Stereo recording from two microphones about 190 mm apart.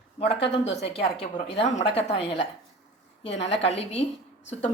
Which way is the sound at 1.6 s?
35° left (ahead or behind).